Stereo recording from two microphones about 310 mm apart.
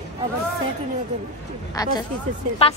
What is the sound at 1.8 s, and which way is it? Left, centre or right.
Speech, centre.